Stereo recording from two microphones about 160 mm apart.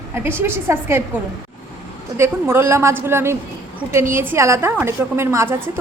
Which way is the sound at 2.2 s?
15° right (ahead or behind).